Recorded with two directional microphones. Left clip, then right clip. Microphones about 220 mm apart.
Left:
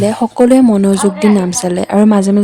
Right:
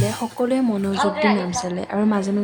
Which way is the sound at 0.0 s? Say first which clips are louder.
Left 12 dB; 50° left (ahead or behind).